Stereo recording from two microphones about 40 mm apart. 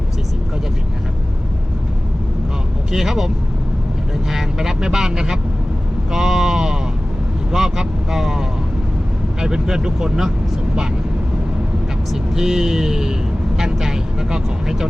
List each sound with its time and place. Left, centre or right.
2.9 s speech: centre
12.1 s speech: centre